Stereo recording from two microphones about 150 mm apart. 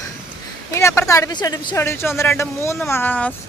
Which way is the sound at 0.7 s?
20° left (ahead or behind).